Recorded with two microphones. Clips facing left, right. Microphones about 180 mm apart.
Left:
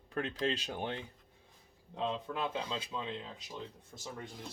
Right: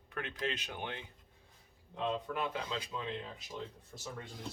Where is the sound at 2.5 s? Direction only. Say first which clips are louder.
Left 1 dB; 25° left (ahead or behind).